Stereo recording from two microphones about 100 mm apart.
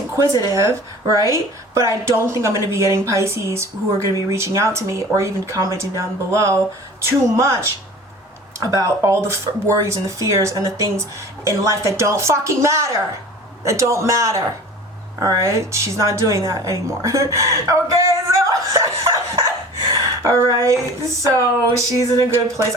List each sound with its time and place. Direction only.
0.4 s a woman's voice: 30° right (ahead or behind)
21.8 s speech: 30° right (ahead or behind)